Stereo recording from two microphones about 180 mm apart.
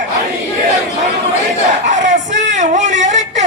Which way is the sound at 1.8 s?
45° right (ahead or behind).